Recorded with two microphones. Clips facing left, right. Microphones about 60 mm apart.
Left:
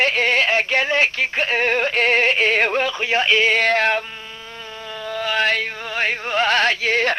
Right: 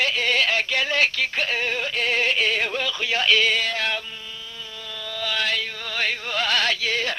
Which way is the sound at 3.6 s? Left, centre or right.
Left.